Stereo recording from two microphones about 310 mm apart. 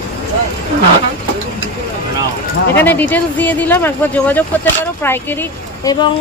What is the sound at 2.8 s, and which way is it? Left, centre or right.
Speech, centre.